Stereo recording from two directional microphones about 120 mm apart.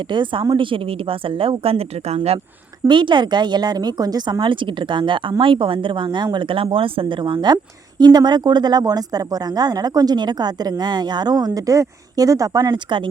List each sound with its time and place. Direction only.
0.1 s speech: 40° right (ahead or behind)
2.8 s speech: 40° right (ahead or behind)